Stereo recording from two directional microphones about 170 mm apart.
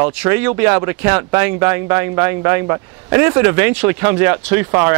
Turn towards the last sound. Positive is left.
turn(degrees=-10)  # may be behind; listen again after turning